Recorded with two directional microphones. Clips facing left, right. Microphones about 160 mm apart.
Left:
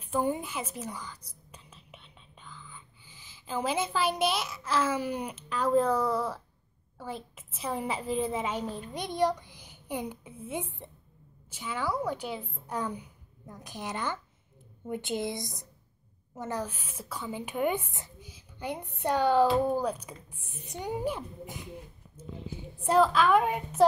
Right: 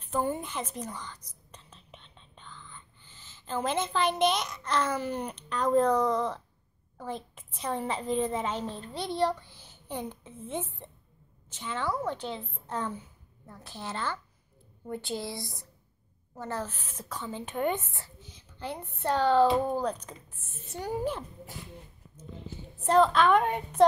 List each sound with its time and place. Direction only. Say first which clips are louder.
0.0 s a woman's voice: left 1 dB; 10° left (ahead or behind)